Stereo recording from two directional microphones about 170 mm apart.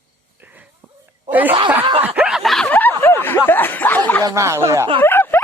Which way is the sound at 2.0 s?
5° right (ahead or behind).